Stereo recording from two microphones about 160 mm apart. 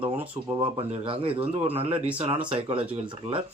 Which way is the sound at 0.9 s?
35° right (ahead or behind).